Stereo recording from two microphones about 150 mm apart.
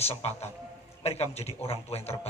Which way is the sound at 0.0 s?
45° left (ahead or behind).